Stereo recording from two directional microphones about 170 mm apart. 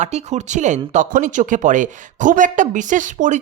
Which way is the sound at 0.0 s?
40° right (ahead or behind).